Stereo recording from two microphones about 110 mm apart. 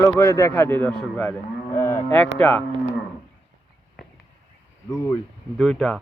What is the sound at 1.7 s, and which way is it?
Cattle, 25° left (ahead or behind).